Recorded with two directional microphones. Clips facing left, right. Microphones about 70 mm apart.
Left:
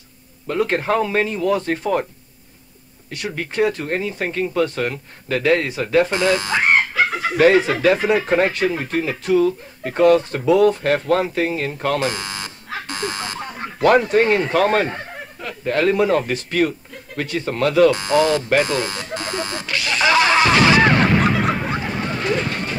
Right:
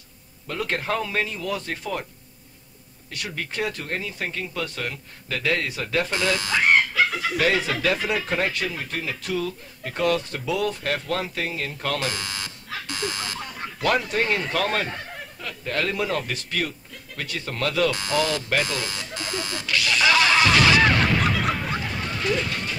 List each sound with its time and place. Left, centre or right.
0.5 s speech: left
3.1 s speech: left